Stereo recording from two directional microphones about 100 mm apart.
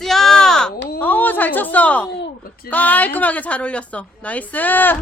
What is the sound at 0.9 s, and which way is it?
A woman's voice, 15° left (ahead or behind).